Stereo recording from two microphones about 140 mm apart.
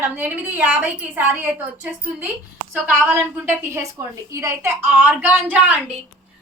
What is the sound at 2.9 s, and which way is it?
A woman's voice, 15° right (ahead or behind).